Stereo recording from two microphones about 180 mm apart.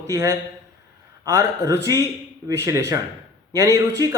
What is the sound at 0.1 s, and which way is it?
Speech, 15° right (ahead or behind).